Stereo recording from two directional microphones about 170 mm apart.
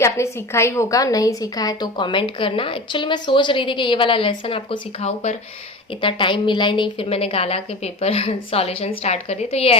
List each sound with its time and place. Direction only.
0.0 s a woman's voice: 15° left (ahead or behind); by 9.7 s 35° left (ahead or behind)